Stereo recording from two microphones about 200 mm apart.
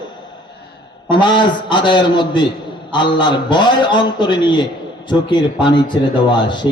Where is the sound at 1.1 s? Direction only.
25° left (ahead or behind).